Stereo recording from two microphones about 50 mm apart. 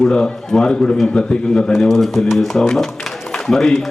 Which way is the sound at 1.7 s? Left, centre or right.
Centre.